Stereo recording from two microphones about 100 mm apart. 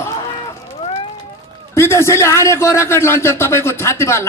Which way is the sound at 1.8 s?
25° left (ahead or behind).